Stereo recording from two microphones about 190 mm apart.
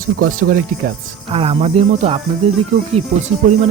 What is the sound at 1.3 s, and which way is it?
Speech, 30° right (ahead or behind).